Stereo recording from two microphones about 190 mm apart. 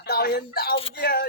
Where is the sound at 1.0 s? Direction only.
55° left (ahead or behind).